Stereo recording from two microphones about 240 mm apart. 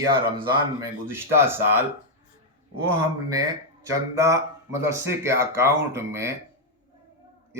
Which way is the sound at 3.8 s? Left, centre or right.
Centre.